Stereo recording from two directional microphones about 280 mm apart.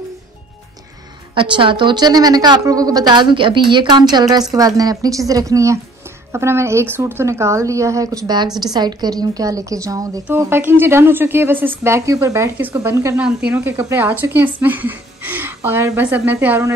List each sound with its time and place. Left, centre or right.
1.3 s speech: centre